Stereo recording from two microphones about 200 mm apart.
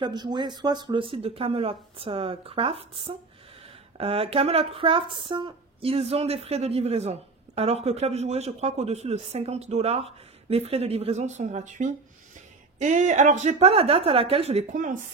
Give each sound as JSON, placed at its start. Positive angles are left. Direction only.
{"t": 0.0, "sound": "speech", "side_deg": -20}